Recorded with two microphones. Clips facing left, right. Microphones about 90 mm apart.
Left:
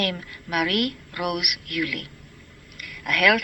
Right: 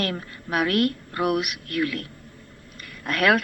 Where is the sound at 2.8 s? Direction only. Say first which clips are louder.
Left 1 dB; 35° right (ahead or behind).